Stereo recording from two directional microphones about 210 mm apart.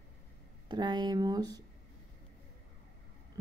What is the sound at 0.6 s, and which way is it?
Speech, 20° right (ahead or behind).